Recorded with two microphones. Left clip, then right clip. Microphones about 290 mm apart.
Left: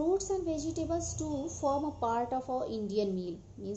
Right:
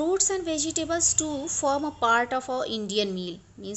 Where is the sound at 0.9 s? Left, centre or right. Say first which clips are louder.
Right 8 dB; right.